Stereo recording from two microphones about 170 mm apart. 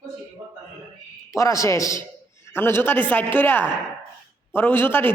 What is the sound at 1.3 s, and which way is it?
A woman's voice, 20° left (ahead or behind).